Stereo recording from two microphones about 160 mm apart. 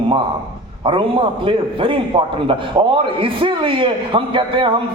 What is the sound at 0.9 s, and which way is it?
A man's voice, 30° right (ahead or behind).